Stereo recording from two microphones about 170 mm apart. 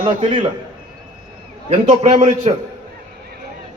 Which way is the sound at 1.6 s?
35° right (ahead or behind).